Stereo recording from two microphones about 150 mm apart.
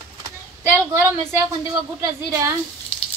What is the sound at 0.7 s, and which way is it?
Speech, 15° right (ahead or behind).